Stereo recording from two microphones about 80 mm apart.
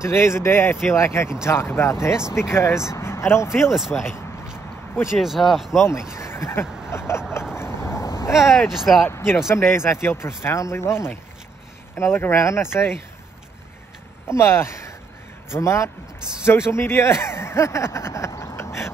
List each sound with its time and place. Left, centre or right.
0.0 s speech: left
3.7 s speech: centre
5.0 s speech: centre
5.8 s speech: left
6.1 s a sound: left
6.9 s vehicle: left
8.4 s speech: centre
9.0 s speech: left
14.3 s speech: left